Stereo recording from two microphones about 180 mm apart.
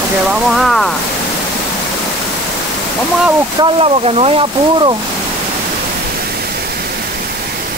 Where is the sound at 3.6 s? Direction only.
30° right (ahead or behind).